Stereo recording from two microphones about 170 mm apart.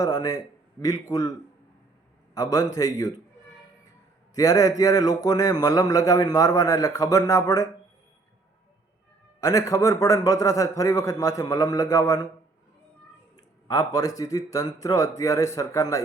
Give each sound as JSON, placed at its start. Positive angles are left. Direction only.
{"t": 0.0, "sound": "speech", "side_deg": 20}
{"t": 2.3, "sound": "speech", "side_deg": 20}
{"t": 4.4, "sound": "speech", "side_deg": 20}
{"t": 9.4, "sound": "speech", "side_deg": 20}
{"t": 13.3, "sound": "speech", "side_deg": 20}